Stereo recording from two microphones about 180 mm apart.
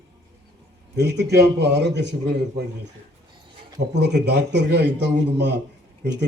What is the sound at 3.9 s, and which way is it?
Speech, 70° right (ahead or behind).